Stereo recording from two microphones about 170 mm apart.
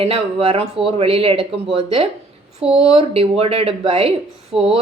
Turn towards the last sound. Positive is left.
turn(degrees=-5)  # may be behind; listen again after turning